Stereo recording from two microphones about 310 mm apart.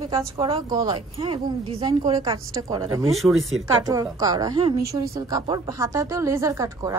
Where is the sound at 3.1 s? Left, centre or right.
Centre.